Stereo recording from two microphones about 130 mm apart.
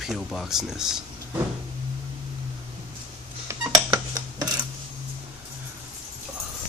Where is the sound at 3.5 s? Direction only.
20° right (ahead or behind).